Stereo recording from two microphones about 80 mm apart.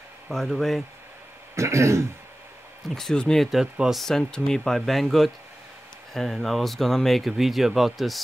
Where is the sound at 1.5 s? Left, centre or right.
Right.